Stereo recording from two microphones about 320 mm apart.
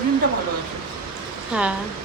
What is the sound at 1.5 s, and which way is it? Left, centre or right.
Speech, centre.